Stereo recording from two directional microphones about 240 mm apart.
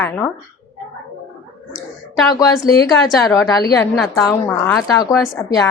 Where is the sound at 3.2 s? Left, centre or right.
Centre.